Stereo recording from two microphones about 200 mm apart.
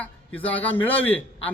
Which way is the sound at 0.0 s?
10° left (ahead or behind).